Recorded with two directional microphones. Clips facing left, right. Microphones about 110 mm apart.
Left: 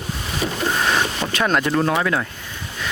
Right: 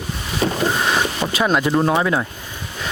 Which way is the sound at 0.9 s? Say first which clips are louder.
Right 1 dB; 10° right (ahead or behind).